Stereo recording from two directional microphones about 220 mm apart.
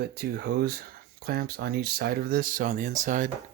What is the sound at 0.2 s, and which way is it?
Speech, 45° right (ahead or behind).